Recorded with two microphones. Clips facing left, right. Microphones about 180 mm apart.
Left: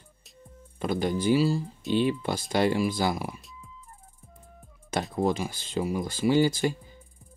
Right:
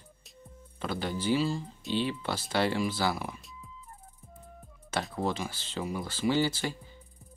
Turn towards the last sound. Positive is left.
turn(degrees=15)  # may be behind; listen again after turning